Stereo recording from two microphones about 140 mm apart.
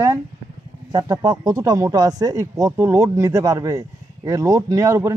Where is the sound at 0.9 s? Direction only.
30° right (ahead or behind).